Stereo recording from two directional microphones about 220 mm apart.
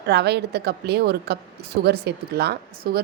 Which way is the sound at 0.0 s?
50° right (ahead or behind).